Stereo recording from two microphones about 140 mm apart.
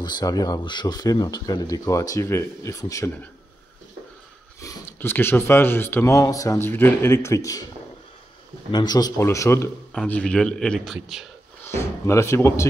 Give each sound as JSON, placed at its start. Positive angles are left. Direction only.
{"t": 0.0, "sound": "speech", "side_deg": 30}
{"t": 4.6, "sound": "speech", "side_deg": 20}
{"t": 8.7, "sound": "speech", "side_deg": 30}
{"t": 9.9, "sound": "a man's voice", "side_deg": 10}
{"t": 11.6, "sound": "speech", "side_deg": 20}